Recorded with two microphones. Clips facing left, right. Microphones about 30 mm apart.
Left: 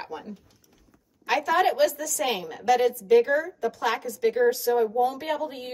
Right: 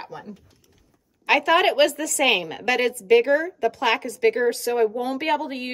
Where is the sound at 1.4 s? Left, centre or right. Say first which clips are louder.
Right 2 dB; right.